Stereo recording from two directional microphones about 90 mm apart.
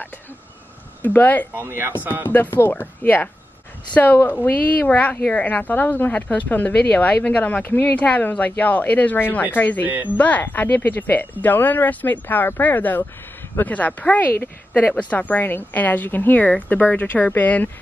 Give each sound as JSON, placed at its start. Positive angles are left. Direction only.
{"t": 1.0, "sound": "a woman's voice", "side_deg": 20}
{"t": 1.6, "sound": "speech", "side_deg": -25}
{"t": 2.2, "sound": "a woman's voice", "side_deg": 25}